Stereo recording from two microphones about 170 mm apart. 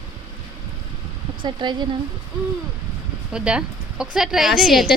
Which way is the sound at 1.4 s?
25° right (ahead or behind).